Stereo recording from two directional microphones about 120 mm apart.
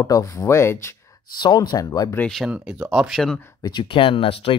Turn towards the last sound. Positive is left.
turn(degrees=50)  # may be behind; listen again after turning